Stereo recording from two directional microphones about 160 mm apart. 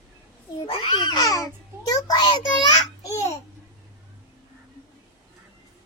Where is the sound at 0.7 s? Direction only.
25° left (ahead or behind).